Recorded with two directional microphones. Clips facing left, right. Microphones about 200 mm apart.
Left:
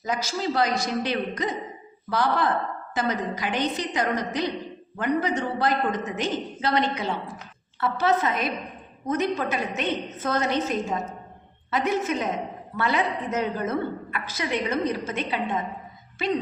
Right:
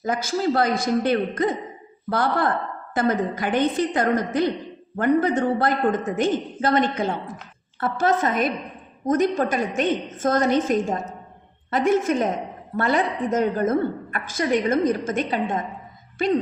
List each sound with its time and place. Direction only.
0.0 s a woman's voice: 50° right (ahead or behind)